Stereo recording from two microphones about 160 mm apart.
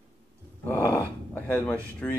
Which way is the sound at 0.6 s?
15° left (ahead or behind).